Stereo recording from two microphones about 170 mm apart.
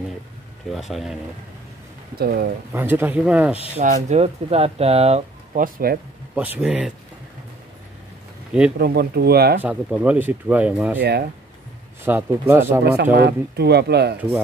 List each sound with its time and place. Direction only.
0.7 s speech: centre (ahead or behind)
2.1 s speech: 65° right (ahead or behind)
2.7 s speech: 10° right (ahead or behind)
3.7 s speech: 45° right (ahead or behind)
5.6 s speech: 60° right (ahead or behind)
6.3 s speech: 10° right (ahead or behind)
8.7 s speech: 70° right (ahead or behind)
9.6 s speech: 10° right (ahead or behind)
11.0 s speech: 75° right (ahead or behind)
12.0 s speech: 10° right (ahead or behind)
13.0 s speech: 65° right (ahead or behind)